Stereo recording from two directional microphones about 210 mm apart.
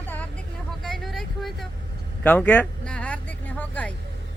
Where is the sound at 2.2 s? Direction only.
10° left (ahead or behind).